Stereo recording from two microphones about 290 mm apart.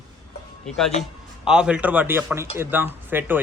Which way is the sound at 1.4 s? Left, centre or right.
Centre.